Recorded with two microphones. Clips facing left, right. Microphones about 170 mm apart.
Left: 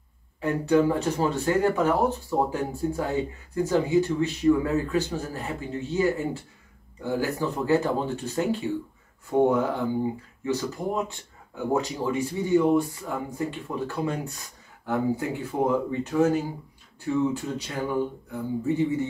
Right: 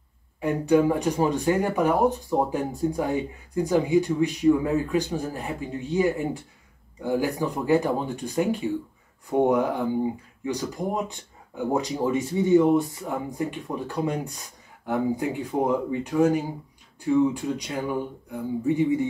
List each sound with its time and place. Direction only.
0.4 s speech: 15° right (ahead or behind)